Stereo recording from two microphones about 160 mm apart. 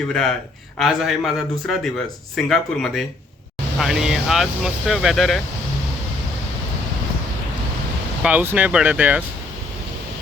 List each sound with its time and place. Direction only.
0.1 s speech: 5° left (ahead or behind)
8.2 s speech: 10° right (ahead or behind)